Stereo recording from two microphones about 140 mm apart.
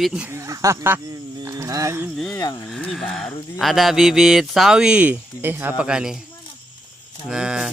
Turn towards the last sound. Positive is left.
turn(degrees=-5)  # may be behind; listen again after turning